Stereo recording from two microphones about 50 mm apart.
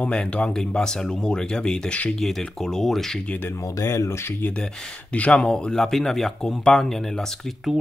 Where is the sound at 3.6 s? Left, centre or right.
Left.